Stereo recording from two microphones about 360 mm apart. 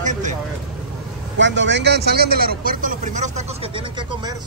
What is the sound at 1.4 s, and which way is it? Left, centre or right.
A man's voice, right.